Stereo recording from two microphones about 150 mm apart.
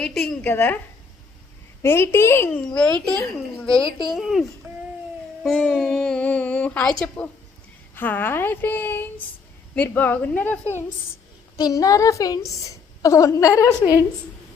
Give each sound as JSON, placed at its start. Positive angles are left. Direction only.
{"t": 0.0, "sound": "a woman's voice", "side_deg": 0}
{"t": 0.4, "sound": "speech", "side_deg": 10}
{"t": 1.8, "sound": "speech", "side_deg": 15}
{"t": 4.0, "sound": "a child's voice", "side_deg": 0}
{"t": 4.7, "sound": "a sound", "side_deg": -15}
{"t": 5.4, "sound": "speech", "side_deg": 5}
{"t": 11.5, "sound": "a woman's voice", "side_deg": 25}